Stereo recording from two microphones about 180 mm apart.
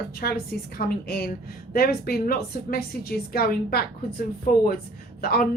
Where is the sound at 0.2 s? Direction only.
55° left (ahead or behind).